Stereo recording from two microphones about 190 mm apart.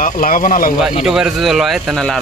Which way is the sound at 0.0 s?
45° left (ahead or behind).